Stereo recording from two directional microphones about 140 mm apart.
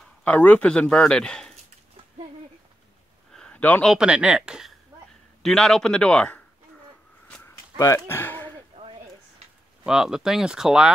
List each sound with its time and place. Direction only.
0.2 s a man's voice: 10° left (ahead or behind)
3.3 s a sound: 10° left (ahead or behind)
3.9 s speech: 5° right (ahead or behind)
7.7 s speech: 20° left (ahead or behind)
8.8 s a sound: 35° right (ahead or behind)
9.8 s speech: 5° right (ahead or behind)